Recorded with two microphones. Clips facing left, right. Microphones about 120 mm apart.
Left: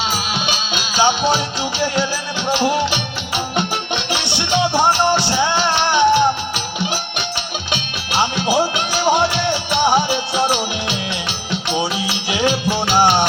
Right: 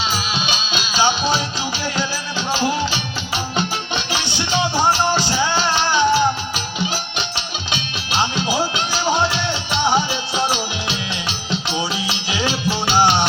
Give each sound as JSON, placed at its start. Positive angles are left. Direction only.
{"t": 0.1, "sound": "music", "side_deg": 55}
{"t": 2.5, "sound": "music", "side_deg": 65}
{"t": 7.7, "sound": "music", "side_deg": 60}